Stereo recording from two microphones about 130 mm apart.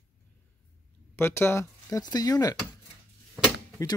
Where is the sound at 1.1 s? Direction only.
20° left (ahead or behind).